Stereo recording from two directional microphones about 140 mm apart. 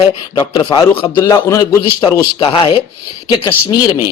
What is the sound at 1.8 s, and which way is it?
A man's voice, 35° left (ahead or behind).